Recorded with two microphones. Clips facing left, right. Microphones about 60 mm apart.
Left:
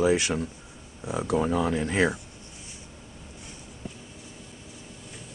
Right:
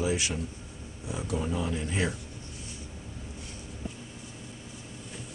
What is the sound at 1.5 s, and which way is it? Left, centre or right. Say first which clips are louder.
Speech: left 6 dB; left.